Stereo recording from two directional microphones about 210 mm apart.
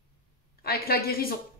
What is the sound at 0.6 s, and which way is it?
Speech, 45° left (ahead or behind).